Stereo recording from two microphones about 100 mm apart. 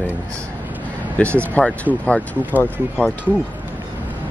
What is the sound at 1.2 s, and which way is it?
Speech, 10° left (ahead or behind).